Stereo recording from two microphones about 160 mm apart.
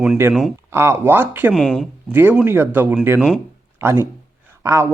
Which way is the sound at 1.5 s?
Centre (ahead or behind).